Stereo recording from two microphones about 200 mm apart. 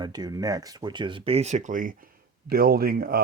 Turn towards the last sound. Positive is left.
turn(degrees=-45)  # may be behind; listen again after turning